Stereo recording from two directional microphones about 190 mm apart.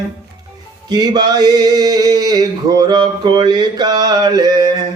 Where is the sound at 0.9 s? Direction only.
20° right (ahead or behind).